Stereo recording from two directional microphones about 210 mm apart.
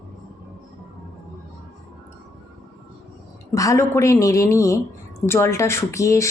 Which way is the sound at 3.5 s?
15° left (ahead or behind).